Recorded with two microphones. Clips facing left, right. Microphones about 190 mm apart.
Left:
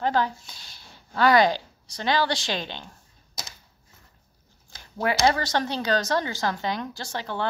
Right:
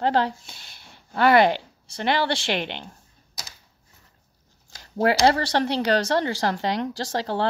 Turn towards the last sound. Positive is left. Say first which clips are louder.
# right 5 dB
turn(degrees=-35)  # may be behind; listen again after turning